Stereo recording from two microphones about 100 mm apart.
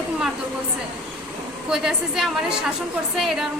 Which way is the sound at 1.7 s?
5° right (ahead or behind).